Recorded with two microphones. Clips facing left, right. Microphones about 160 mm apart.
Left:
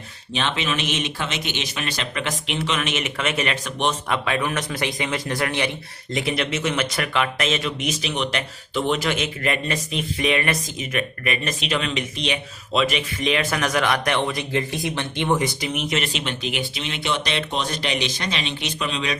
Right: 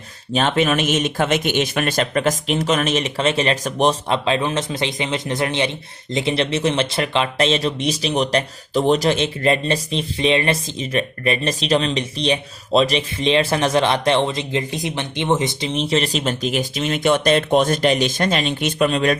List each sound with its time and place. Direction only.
0.3 s speech: 50° right (ahead or behind)